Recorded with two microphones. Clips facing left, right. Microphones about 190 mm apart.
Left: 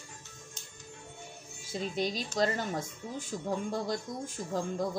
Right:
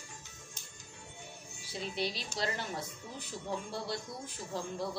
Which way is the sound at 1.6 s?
45° left (ahead or behind).